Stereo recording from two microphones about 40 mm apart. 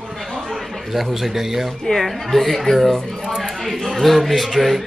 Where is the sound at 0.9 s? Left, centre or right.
Centre.